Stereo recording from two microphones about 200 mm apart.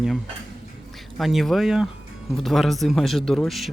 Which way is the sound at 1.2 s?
Centre (ahead or behind).